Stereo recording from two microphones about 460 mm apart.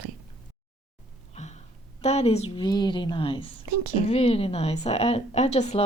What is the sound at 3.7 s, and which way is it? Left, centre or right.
Speech, right.